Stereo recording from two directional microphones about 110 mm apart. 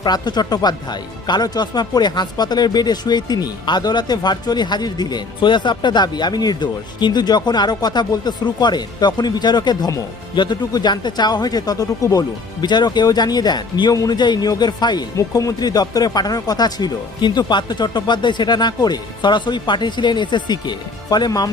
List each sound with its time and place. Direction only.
0.0 s speech: 40° left (ahead or behind)
15.2 s speech: 30° left (ahead or behind)